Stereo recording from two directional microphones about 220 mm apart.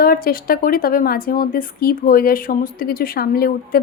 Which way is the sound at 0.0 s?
40° left (ahead or behind).